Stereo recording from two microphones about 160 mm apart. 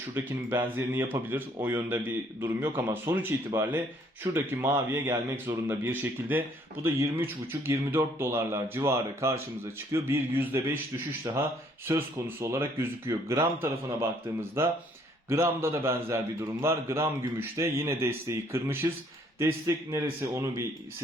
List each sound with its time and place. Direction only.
0.1 s speech: 10° right (ahead or behind)
11.9 s speech: 15° right (ahead or behind)